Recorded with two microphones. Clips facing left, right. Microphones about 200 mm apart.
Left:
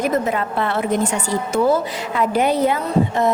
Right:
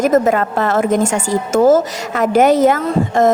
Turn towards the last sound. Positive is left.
turn(degrees=-90)